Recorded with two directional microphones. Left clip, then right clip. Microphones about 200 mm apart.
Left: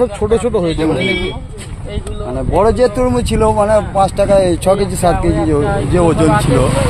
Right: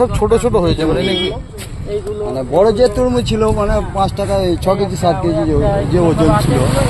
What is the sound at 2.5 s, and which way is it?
Speech, 30° left (ahead or behind).